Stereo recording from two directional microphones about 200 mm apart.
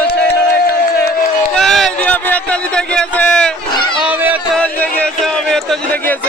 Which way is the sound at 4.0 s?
10° right (ahead or behind).